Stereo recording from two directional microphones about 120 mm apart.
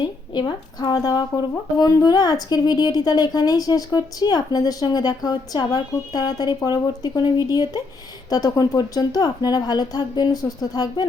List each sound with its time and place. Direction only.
0.0 s speech: 40° left (ahead or behind)